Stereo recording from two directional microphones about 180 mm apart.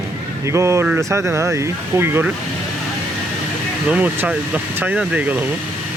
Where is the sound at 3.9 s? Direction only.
10° right (ahead or behind).